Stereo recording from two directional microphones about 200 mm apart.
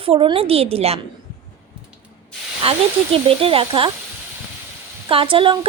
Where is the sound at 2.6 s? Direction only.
30° right (ahead or behind).